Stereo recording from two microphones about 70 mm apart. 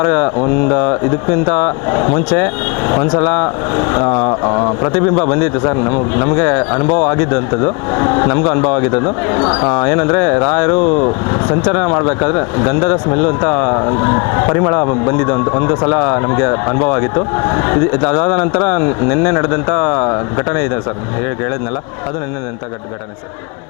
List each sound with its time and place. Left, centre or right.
0.0 s speech: left